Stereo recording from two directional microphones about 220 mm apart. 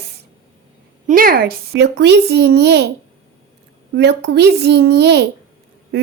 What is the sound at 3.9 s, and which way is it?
Speech, 50° right (ahead or behind).